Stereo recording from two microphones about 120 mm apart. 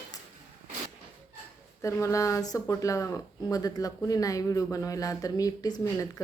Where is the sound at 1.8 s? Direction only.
25° left (ahead or behind).